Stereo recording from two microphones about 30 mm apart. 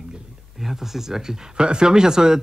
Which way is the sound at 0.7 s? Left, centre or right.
Centre.